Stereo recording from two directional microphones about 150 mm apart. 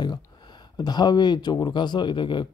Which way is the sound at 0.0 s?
30° left (ahead or behind).